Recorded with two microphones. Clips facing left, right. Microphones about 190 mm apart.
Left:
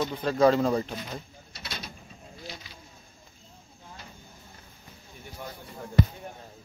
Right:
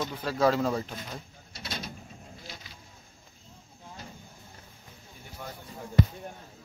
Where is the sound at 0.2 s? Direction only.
5° right (ahead or behind).